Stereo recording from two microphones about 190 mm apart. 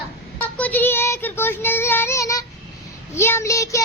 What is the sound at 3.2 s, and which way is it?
Speech, 15° left (ahead or behind).